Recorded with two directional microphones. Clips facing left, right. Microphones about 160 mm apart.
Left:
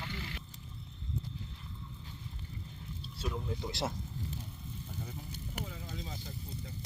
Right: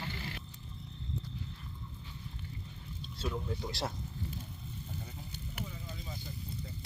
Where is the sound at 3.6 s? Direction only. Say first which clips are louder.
Left 5 dB; 20° left (ahead or behind).